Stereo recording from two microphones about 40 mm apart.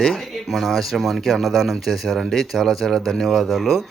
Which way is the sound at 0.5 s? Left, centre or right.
Centre.